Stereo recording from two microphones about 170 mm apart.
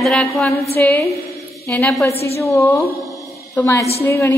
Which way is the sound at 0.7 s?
10° left (ahead or behind).